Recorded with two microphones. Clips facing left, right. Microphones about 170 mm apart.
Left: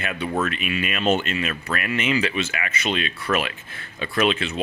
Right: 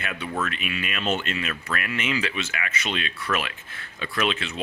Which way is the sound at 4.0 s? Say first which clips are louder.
Left 5 dB; 5° left (ahead or behind).